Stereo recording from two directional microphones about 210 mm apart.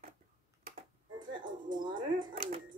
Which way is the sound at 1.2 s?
40° right (ahead or behind).